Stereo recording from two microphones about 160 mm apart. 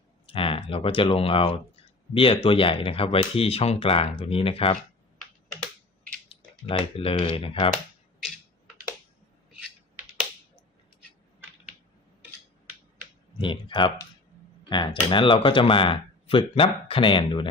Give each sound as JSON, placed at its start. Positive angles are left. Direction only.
{"t": 0.3, "sound": "speech", "side_deg": 35}
{"t": 6.7, "sound": "speech", "side_deg": 35}
{"t": 9.9, "sound": "finger snapping", "side_deg": -10}
{"t": 13.4, "sound": "speech", "side_deg": 30}